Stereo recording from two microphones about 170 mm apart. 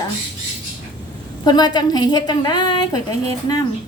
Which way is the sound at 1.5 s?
25° left (ahead or behind).